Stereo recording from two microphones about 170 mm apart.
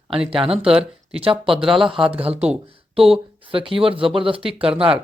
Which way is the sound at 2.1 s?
35° right (ahead or behind).